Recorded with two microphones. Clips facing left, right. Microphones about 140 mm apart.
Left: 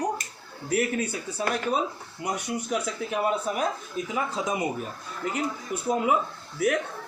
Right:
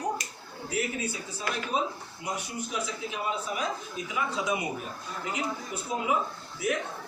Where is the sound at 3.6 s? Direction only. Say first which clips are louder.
Left 4 dB; 45° left (ahead or behind).